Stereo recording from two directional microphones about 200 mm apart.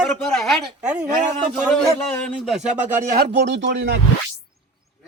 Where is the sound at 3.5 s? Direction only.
60° right (ahead or behind).